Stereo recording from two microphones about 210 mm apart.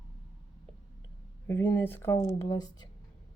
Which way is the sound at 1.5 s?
10° left (ahead or behind).